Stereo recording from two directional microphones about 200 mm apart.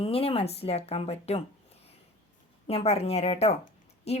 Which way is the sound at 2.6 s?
30° left (ahead or behind).